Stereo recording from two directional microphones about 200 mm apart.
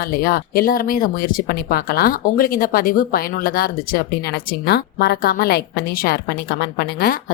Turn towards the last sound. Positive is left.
turn(degrees=50)  # may be behind; listen again after turning